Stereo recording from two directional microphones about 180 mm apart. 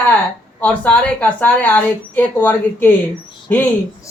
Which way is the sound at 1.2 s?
10° left (ahead or behind).